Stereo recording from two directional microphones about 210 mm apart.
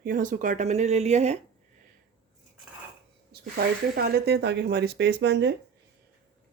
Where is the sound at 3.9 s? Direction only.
45° right (ahead or behind).